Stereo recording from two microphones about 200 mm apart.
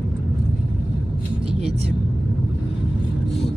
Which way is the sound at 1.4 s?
30° right (ahead or behind).